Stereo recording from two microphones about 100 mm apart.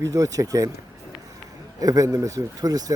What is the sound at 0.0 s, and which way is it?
Speech, 35° right (ahead or behind).